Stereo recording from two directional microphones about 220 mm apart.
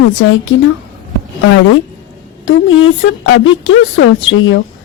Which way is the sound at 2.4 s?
60° left (ahead or behind).